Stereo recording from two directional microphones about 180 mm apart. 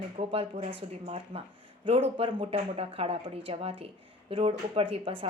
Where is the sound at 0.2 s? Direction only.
35° right (ahead or behind).